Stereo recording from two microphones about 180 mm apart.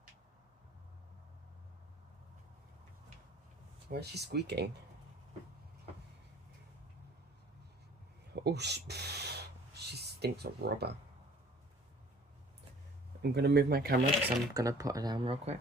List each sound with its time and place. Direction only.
3.8 s speech: 65° right (ahead or behind)
8.3 s a sound: 65° right (ahead or behind)
13.2 s speech: 65° right (ahead or behind)
14.3 s speech: 20° right (ahead or behind)